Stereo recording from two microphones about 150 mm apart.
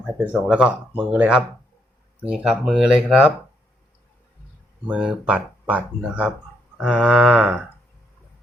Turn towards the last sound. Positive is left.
turn(degrees=-10)  # may be behind; listen again after turning